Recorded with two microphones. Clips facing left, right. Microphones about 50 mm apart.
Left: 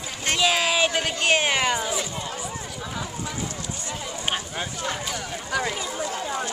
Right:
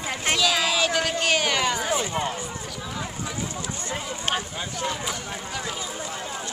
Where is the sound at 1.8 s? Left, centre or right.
Right.